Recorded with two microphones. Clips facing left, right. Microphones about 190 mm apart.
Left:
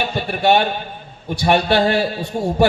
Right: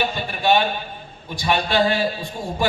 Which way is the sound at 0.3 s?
65° left (ahead or behind).